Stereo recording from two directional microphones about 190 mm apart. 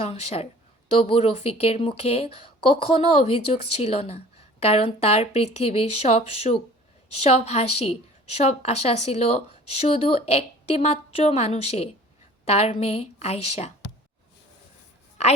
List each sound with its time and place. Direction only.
0.0 s a woman's voice: 30° left (ahead or behind)